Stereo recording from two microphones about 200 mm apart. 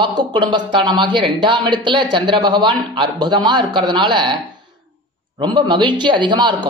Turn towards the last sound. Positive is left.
turn(degrees=-20)  # may be behind; listen again after turning